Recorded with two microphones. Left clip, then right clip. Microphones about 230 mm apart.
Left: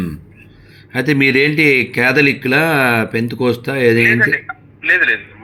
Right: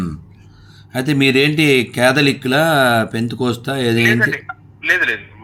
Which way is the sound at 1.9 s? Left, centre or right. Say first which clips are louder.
Left 1 dB; right.